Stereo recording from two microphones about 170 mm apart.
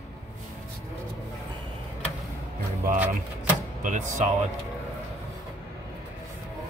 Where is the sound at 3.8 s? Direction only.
45° right (ahead or behind).